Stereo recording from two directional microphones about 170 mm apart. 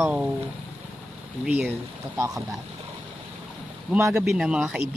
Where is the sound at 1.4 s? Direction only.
10° right (ahead or behind).